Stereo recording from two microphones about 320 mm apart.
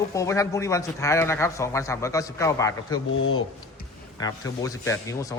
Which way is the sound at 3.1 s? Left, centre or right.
Left.